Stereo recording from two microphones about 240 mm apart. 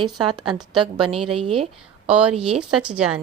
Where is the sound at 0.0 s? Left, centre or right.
Centre.